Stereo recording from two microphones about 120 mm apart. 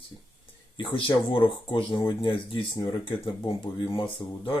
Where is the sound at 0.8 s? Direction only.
45° left (ahead or behind).